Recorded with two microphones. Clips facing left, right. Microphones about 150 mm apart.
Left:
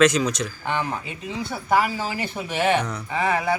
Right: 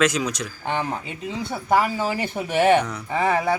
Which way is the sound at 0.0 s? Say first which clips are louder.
Left 3 dB; 10° right (ahead or behind).